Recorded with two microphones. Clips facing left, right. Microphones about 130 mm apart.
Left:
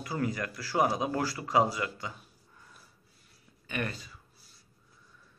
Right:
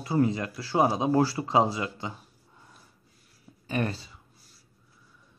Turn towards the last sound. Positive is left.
turn(degrees=-30)  # may be behind; listen again after turning